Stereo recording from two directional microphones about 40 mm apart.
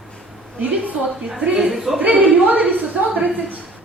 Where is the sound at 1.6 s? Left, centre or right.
Centre.